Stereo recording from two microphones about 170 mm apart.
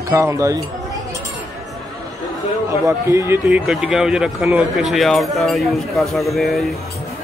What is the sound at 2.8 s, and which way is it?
A man's voice, 15° right (ahead or behind).